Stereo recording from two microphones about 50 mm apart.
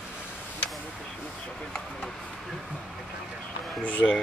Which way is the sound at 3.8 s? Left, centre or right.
Left.